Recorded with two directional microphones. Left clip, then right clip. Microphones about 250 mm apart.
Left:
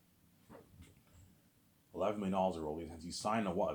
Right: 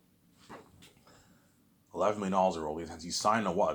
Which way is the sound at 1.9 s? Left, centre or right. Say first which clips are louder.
Right 7 dB; centre.